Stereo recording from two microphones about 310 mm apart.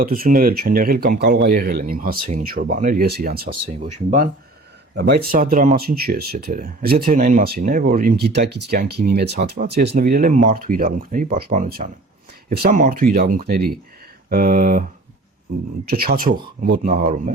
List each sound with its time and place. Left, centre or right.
0.0 s speech: right
15.9 s speech: right